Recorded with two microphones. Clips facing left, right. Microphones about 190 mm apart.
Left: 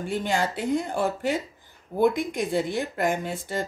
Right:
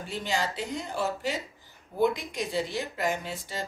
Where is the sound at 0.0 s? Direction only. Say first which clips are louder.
Left 5 dB; 55° left (ahead or behind).